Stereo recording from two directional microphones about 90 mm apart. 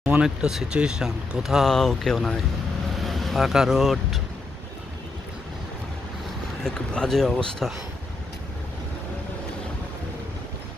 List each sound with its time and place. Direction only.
0.0 s a sound: 20° right (ahead or behind)
0.4 s speech: 10° right (ahead or behind)
6.6 s speech: 5° left (ahead or behind)